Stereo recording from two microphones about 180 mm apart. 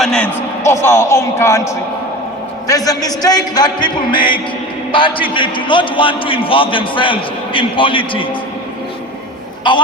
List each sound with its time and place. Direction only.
0.0 s a man's voice: 5° left (ahead or behind)
0.6 s a man's voice: 15° left (ahead or behind)
9.7 s a man's voice: 25° left (ahead or behind)